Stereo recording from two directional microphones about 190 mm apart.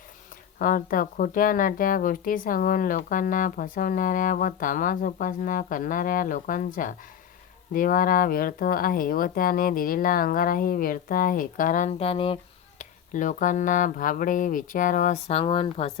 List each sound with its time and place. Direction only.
0.6 s speech: 45° left (ahead or behind); by 12.4 s 30° left (ahead or behind)
12.8 s speech: 40° left (ahead or behind)